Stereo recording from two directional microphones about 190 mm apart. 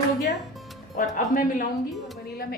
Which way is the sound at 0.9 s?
45° left (ahead or behind).